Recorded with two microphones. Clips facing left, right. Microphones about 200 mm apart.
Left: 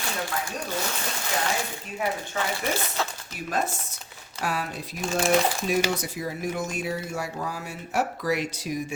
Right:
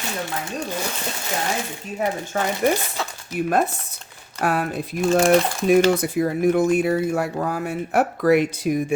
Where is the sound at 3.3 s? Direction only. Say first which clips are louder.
Right 9 dB; 60° right (ahead or behind).